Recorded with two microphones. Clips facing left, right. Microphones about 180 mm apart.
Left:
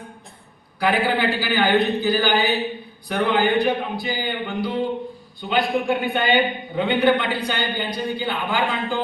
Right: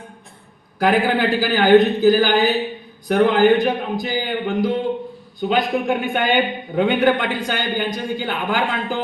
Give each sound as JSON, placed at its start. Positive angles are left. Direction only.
{"t": 0.8, "sound": "speech", "side_deg": -45}